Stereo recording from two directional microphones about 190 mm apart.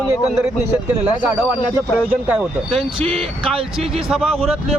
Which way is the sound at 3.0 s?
30° right (ahead or behind).